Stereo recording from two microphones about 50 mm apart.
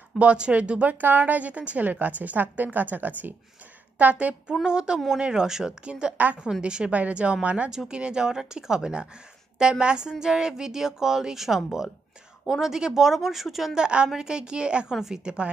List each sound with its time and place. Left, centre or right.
0.2 s a woman's voice: right
4.6 s a woman's voice: centre
13.7 s speech: centre
14.9 s speech: centre